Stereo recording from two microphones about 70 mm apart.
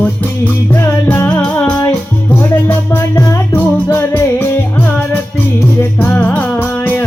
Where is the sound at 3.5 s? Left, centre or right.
Left.